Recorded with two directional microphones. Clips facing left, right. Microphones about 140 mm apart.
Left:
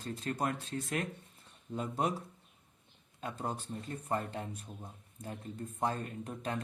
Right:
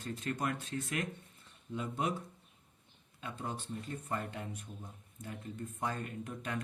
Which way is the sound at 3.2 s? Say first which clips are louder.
Left 3 dB; 40° left (ahead or behind).